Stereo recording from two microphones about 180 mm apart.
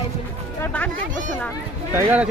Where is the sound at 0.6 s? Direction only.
10° left (ahead or behind).